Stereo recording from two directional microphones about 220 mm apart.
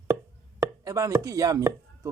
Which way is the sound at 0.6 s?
15° right (ahead or behind).